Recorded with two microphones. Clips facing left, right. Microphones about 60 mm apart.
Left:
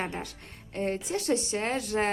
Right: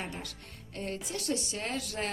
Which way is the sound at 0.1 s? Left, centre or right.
Left.